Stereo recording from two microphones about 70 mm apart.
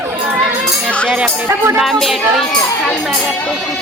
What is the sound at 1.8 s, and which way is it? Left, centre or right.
Speech, centre.